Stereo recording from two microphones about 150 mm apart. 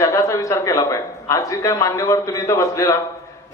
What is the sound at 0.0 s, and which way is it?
A man's voice, 20° left (ahead or behind).